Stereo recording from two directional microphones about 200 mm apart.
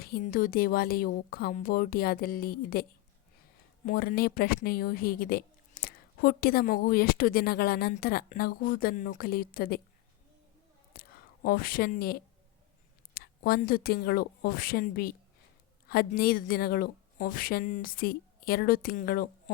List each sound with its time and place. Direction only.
0.0 s speech: 45° left (ahead or behind)
3.8 s speech: 45° left (ahead or behind)
10.9 s a sound: 50° left (ahead or behind)
11.4 s speech: 45° left (ahead or behind)
13.1 s speech: 50° left (ahead or behind)